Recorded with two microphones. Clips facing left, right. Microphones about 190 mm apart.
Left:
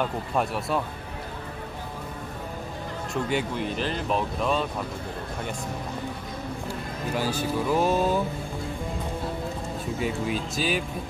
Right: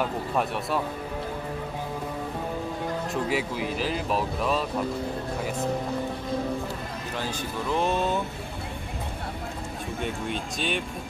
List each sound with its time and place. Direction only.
3.3 s speech: 5° right (ahead or behind)
7.2 s speech: 10° left (ahead or behind)
9.9 s speech: 5° left (ahead or behind)